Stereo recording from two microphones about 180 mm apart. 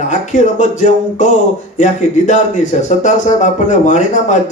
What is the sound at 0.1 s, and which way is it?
Speech, 45° left (ahead or behind).